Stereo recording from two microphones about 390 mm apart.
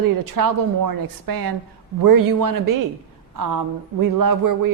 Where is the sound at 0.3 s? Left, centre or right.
Right.